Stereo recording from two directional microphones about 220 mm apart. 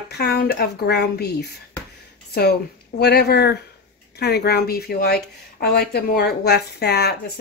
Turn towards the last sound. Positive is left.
turn(degrees=50)  # may be behind; listen again after turning